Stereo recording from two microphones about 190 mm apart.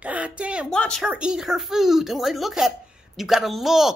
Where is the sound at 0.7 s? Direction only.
5° left (ahead or behind).